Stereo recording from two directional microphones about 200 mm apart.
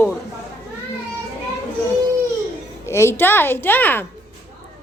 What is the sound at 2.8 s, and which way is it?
A woman's voice, 15° left (ahead or behind).